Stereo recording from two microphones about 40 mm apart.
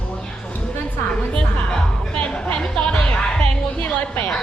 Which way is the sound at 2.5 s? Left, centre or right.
Left.